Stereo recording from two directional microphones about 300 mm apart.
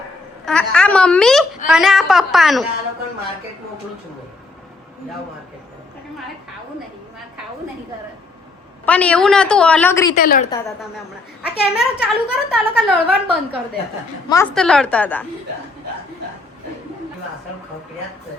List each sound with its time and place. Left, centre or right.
0.4 s a woman's voice: centre
8.9 s a woman's voice: centre
10.2 s a woman's voice: left
11.4 s a woman's voice: centre